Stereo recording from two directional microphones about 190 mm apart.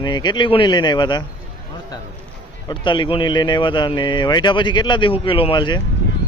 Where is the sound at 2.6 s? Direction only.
25° left (ahead or behind).